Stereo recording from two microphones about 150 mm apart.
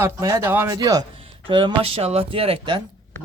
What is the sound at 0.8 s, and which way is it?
Speech, 25° right (ahead or behind).